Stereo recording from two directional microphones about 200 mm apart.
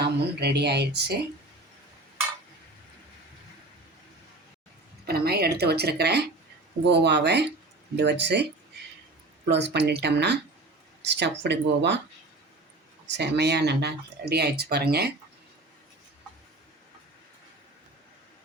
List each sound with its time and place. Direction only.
0.0 s speech: 55° right (ahead or behind)
5.0 s speech: 50° right (ahead or behind)
9.5 s speech: 60° right (ahead or behind)
13.1 s speech: 60° right (ahead or behind)